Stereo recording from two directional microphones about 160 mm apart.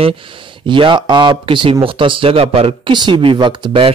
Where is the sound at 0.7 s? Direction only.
30° right (ahead or behind).